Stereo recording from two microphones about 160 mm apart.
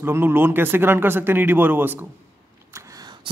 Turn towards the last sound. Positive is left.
turn(degrees=-25)  # may be behind; listen again after turning